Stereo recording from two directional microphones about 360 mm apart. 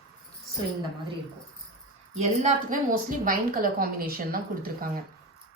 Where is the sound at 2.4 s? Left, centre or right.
Right.